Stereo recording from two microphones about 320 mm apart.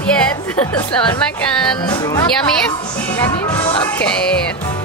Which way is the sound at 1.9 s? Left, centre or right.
Centre.